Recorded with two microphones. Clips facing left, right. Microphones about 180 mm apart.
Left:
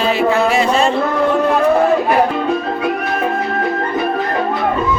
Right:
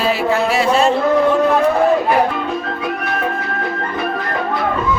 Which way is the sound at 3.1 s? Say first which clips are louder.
Left 3 dB; 30° left (ahead or behind).